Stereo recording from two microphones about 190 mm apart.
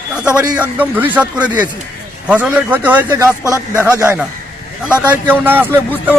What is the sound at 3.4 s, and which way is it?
Speech, 15° left (ahead or behind).